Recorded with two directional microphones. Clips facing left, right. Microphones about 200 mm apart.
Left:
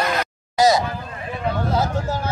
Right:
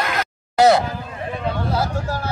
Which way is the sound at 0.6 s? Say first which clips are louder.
Right 3 dB; 65° right (ahead or behind).